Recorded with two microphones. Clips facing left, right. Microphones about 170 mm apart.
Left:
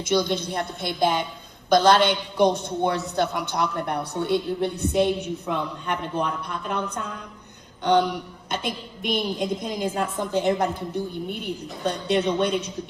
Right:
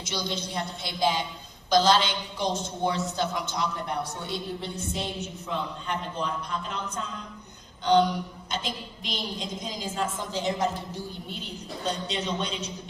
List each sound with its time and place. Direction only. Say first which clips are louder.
0.0 s a woman's voice: left 9 dB; 55° left (ahead or behind)